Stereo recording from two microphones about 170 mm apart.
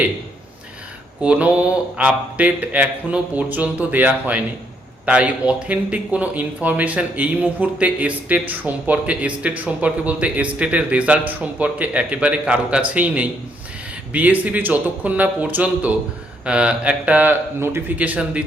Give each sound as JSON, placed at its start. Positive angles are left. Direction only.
{"t": 1.2, "sound": "speech", "side_deg": -10}